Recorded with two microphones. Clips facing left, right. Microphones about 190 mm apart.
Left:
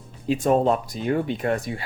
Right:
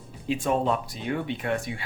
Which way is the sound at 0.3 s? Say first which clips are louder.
Left 5 dB; 40° left (ahead or behind).